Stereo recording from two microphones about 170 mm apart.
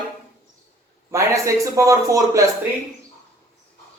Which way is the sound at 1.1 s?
20° right (ahead or behind).